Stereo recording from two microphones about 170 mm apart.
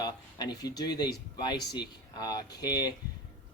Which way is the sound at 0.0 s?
25° left (ahead or behind).